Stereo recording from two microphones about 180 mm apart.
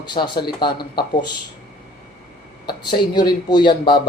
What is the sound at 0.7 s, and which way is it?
Speech, 60° left (ahead or behind).